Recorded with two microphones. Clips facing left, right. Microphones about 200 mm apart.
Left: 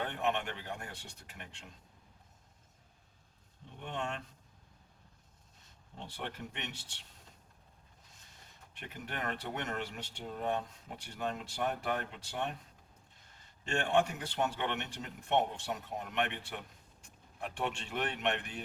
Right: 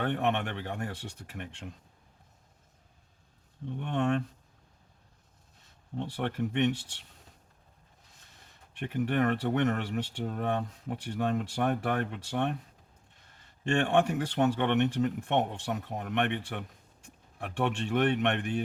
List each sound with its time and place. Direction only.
0.0 s speech: 60° right (ahead or behind)
3.8 s speech: 60° right (ahead or behind)
6.0 s speech: 60° right (ahead or behind)
8.9 s speech: 55° right (ahead or behind)
13.7 s speech: 60° right (ahead or behind)